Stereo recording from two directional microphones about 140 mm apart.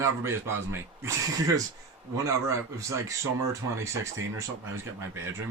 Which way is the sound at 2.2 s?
20° right (ahead or behind).